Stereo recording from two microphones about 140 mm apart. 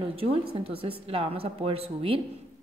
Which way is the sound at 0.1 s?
45° right (ahead or behind).